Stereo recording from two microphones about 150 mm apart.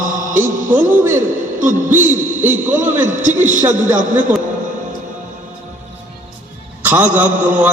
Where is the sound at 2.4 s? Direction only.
15° right (ahead or behind).